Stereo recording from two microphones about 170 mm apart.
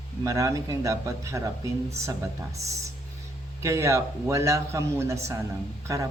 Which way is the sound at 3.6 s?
15° right (ahead or behind).